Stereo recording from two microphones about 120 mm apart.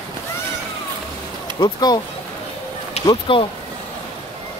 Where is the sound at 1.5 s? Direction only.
40° left (ahead or behind).